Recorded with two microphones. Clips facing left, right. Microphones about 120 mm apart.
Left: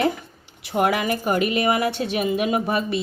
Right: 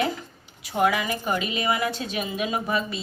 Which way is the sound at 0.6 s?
60° left (ahead or behind).